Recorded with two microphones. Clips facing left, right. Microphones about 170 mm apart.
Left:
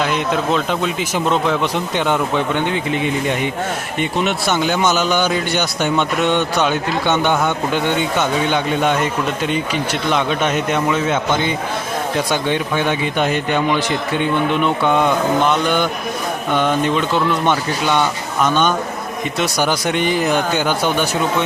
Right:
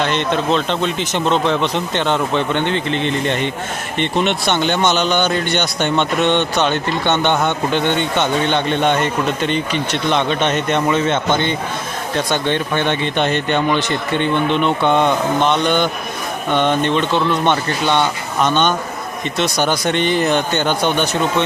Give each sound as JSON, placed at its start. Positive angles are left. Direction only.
{"t": 0.0, "sound": "speech", "side_deg": 5}